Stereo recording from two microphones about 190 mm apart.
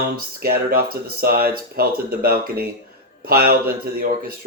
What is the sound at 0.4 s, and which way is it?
Speech, 55° right (ahead or behind).